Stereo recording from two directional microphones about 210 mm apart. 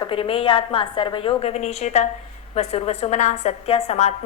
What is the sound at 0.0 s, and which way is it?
A woman's voice, 25° left (ahead or behind).